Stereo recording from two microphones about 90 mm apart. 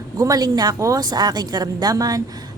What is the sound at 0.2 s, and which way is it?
A woman's voice, 45° right (ahead or behind).